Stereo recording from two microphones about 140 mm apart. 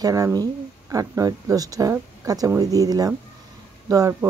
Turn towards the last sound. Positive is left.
turn(degrees=-25)  # may be behind; listen again after turning